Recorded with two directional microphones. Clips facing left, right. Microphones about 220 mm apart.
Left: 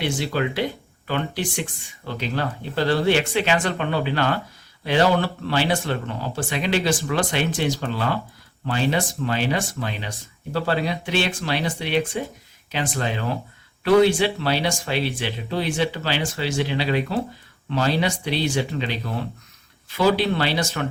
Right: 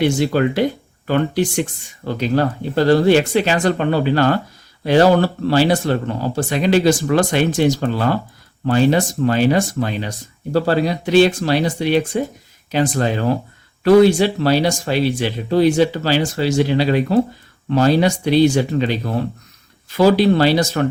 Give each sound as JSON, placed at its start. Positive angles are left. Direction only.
{"t": 0.0, "sound": "speech", "side_deg": -45}